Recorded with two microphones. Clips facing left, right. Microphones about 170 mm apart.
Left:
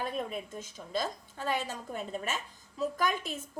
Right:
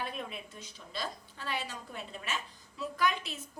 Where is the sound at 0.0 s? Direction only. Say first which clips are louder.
Left 5 dB; 40° left (ahead or behind).